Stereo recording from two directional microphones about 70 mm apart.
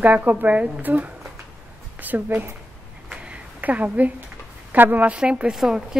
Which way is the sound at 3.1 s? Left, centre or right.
Centre.